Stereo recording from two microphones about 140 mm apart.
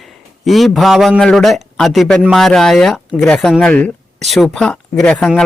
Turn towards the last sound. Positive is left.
turn(degrees=5)  # may be behind; listen again after turning